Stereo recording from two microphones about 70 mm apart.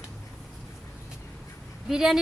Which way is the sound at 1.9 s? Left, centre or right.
Centre.